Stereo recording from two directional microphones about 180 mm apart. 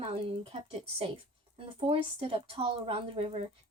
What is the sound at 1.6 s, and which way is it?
Speech, 30° right (ahead or behind).